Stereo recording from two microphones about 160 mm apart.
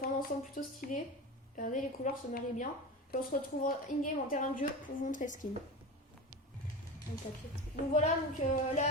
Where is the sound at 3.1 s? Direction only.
70° left (ahead or behind).